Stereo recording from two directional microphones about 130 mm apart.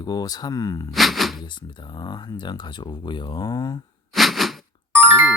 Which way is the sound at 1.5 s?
35° left (ahead or behind).